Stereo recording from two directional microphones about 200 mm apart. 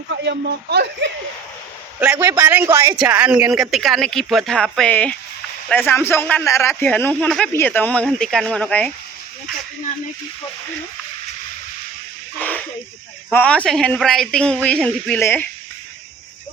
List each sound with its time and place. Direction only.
0.1 s speech: 55° right (ahead or behind)
2.0 s speech: 15° right (ahead or behind); by 8.9 s 5° left (ahead or behind)
12.4 s a sound: 10° left (ahead or behind)
13.3 s speech: 5° left (ahead or behind)